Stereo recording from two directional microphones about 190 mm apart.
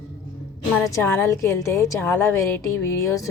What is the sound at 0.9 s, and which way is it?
A woman's voice, 15° left (ahead or behind).